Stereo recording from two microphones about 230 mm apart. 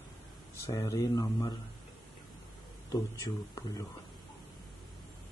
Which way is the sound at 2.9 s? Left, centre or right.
Centre.